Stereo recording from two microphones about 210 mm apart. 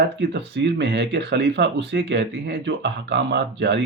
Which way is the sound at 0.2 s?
55° right (ahead or behind).